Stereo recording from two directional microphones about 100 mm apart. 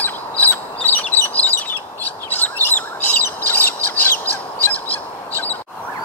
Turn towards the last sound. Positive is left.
turn(degrees=15)  # may be behind; listen again after turning